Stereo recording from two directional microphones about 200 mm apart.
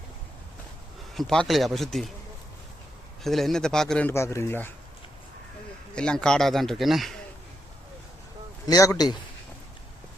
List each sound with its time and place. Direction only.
1.1 s speech: centre (ahead or behind)
3.2 s speech: centre (ahead or behind)
5.9 s speech: 5° left (ahead or behind)
8.6 s speech: 20° left (ahead or behind)